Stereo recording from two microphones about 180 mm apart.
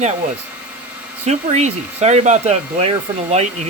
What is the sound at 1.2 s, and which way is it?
Speech, 40° right (ahead or behind).